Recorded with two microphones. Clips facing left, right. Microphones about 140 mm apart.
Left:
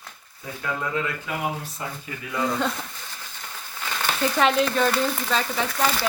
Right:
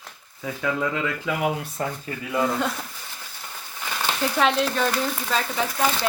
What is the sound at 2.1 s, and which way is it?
Speech, 40° right (ahead or behind).